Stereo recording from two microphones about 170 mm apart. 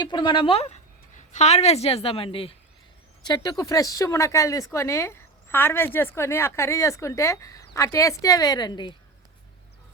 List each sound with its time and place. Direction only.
0.0 s speech: 25° left (ahead or behind)